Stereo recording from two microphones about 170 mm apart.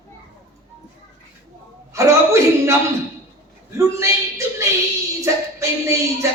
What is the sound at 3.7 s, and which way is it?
A man's voice, 15° right (ahead or behind).